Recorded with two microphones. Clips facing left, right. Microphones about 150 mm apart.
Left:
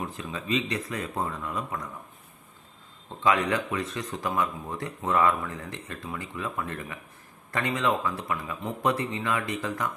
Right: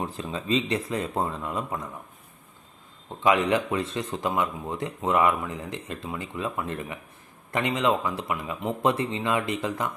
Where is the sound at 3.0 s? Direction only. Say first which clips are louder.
Right 3 dB; 20° right (ahead or behind).